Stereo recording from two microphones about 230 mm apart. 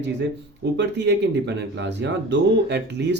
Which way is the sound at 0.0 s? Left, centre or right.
Right.